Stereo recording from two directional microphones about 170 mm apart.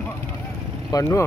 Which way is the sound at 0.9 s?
20° left (ahead or behind).